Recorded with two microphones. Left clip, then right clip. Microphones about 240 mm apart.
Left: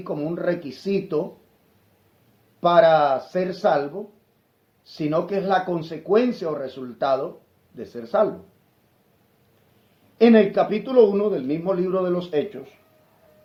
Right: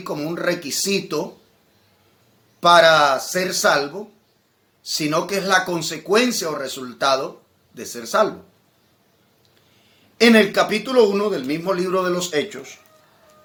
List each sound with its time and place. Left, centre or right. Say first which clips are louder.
0.0 s speech: right 2 dB; right
2.6 s speech: right 3 dB; right
10.2 s speech: right 2 dB; right